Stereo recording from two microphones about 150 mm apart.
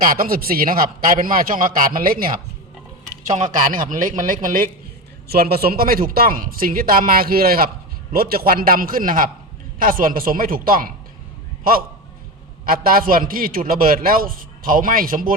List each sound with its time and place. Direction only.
0.0 s a man's voice: 70° right (ahead or behind)
3.2 s a man's voice: 50° right (ahead or behind)
5.3 s a man's voice: 90° right; by 10.9 s 70° right (ahead or behind)
12.6 s a man's voice: 70° right (ahead or behind)